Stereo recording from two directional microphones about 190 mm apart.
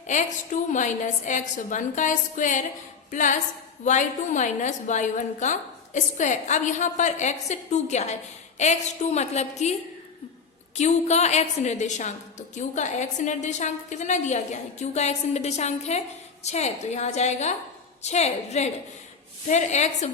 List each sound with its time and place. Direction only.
0.1 s a woman's voice: 40° left (ahead or behind)
10.8 s a woman's voice: 35° left (ahead or behind)